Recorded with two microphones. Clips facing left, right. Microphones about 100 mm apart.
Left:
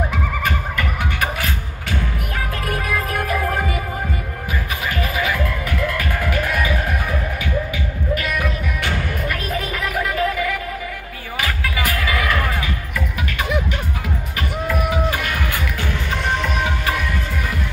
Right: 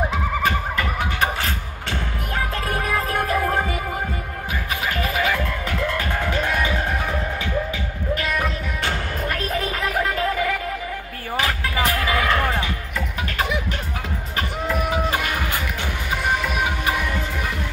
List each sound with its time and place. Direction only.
2.7 s music: 30° right (ahead or behind)
5.0 s music: 35° right (ahead or behind)
14.3 s music: 30° right (ahead or behind)
16.3 s music: 10° right (ahead or behind)